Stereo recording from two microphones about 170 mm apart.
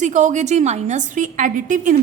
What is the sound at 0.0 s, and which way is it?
A woman's voice, 45° right (ahead or behind).